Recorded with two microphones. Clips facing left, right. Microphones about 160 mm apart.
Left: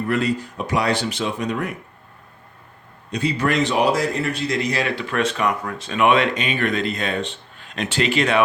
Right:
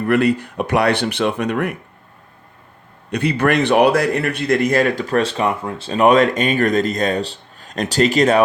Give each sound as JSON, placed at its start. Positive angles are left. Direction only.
{"t": 0.1, "sound": "speech", "side_deg": -60}
{"t": 3.1, "sound": "a man's voice", "side_deg": -60}